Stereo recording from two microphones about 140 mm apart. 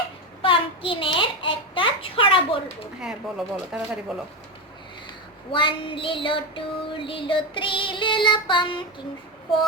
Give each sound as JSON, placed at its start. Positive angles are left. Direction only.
{"t": 0.4, "sound": "a sound", "side_deg": 40}
{"t": 3.0, "sound": "speech", "side_deg": -5}
{"t": 5.5, "sound": "child singing", "side_deg": 35}